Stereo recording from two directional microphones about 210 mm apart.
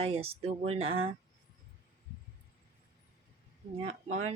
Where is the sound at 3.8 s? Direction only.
30° right (ahead or behind).